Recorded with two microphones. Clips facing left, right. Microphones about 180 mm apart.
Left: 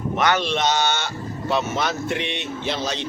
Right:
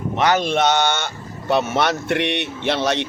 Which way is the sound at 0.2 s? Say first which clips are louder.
Right 4 dB; 40° right (ahead or behind).